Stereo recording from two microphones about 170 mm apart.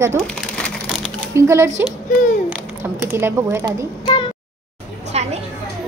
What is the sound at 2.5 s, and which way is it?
A child's voice, 15° right (ahead or behind).